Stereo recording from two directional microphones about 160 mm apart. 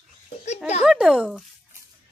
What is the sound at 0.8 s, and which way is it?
Speech, 5° right (ahead or behind).